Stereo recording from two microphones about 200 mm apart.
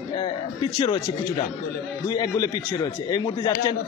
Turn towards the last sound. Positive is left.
turn(degrees=20)  # may be behind; listen again after turning